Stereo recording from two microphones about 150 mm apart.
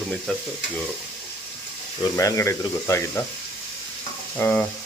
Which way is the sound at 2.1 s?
20° left (ahead or behind).